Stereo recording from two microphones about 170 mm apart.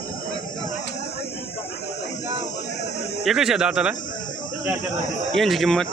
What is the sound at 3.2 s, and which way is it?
Speech, 5° right (ahead or behind).